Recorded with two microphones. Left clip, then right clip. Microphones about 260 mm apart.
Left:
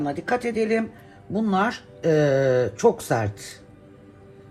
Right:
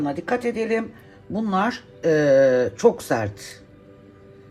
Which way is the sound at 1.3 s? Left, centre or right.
Right.